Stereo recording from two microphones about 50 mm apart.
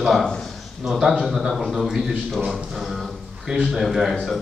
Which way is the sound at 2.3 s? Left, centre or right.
Centre.